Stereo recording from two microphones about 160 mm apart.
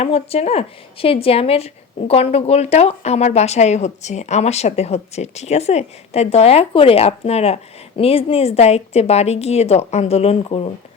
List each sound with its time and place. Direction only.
0.0 s a woman's voice: 40° left (ahead or behind)